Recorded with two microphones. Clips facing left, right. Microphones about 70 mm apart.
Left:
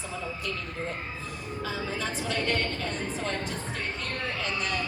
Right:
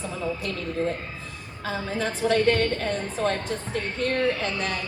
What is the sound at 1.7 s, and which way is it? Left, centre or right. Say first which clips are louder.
A woman's voice: right 6 dB; right.